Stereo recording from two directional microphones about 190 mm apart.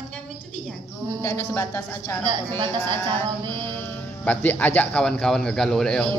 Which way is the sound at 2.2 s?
25° right (ahead or behind).